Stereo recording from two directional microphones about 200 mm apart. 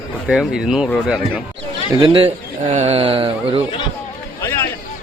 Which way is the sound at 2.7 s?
30° right (ahead or behind).